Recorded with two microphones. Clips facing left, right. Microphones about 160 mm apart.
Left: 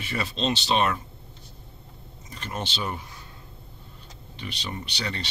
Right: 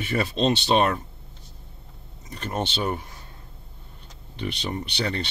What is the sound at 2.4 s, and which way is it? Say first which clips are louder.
Speech: right 5 dB; 50° right (ahead or behind).